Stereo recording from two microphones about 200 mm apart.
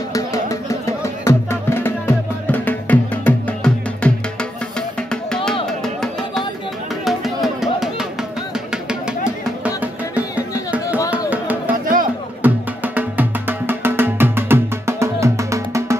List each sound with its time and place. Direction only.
0.1 s music: 15° left (ahead or behind)
7.1 s music: centre (ahead or behind)
11.8 s music: 45° right (ahead or behind)
12.4 s music: 10° right (ahead or behind)